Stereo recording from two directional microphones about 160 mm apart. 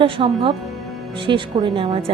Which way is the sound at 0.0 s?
35° right (ahead or behind).